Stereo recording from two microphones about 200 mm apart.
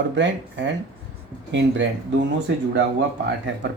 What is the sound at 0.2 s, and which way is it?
Speech, 65° right (ahead or behind).